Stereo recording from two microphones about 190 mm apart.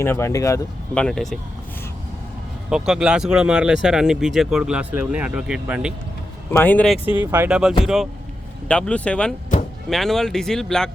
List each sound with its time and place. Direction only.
0.0 s speech: 15° left (ahead or behind)
1.0 s speech: 5° left (ahead or behind)
2.6 s speech: 5° right (ahead or behind)
6.5 s speech: 10° left (ahead or behind)
7.0 s speech: 25° left (ahead or behind)
7.3 s speech: 10° right (ahead or behind)